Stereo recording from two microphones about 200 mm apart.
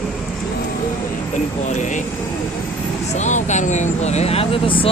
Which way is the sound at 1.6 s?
40° left (ahead or behind).